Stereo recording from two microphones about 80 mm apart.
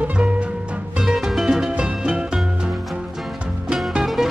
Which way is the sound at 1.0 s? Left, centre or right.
Centre.